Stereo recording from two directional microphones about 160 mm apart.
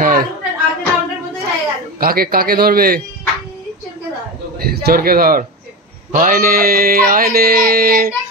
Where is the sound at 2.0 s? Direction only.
70° right (ahead or behind).